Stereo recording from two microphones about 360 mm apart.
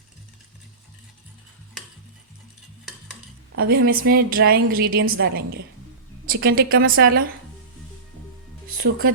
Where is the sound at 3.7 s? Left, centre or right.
Right.